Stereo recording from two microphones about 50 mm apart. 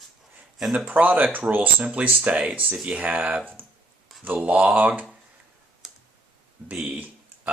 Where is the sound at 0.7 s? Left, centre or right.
Right.